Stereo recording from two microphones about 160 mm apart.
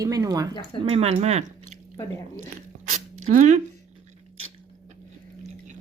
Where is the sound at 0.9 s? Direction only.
40° right (ahead or behind).